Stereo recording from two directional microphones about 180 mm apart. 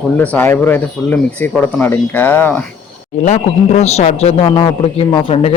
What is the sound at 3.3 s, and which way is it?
A man's voice, 40° left (ahead or behind).